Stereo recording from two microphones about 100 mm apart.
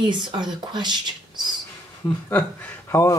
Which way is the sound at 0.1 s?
50° right (ahead or behind).